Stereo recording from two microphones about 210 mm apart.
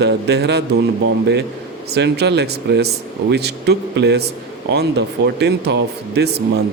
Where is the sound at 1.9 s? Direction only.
55° right (ahead or behind).